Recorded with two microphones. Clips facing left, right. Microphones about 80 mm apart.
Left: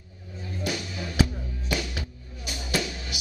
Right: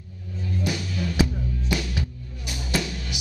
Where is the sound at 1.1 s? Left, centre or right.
Centre.